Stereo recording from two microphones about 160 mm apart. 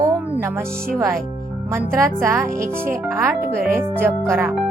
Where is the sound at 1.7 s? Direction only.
15° right (ahead or behind).